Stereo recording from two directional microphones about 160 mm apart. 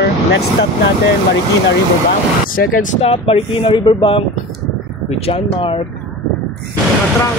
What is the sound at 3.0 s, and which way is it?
Speech, 35° left (ahead or behind).